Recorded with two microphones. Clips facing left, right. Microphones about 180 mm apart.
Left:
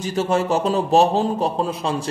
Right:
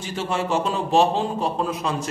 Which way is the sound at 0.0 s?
40° left (ahead or behind).